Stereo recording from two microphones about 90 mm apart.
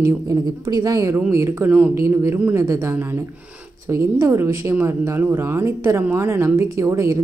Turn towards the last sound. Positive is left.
turn(degrees=-35)  # may be behind; listen again after turning